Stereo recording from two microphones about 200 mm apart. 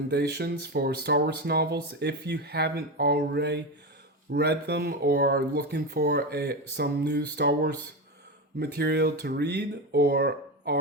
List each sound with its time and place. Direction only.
0.1 s speech: 55° right (ahead or behind)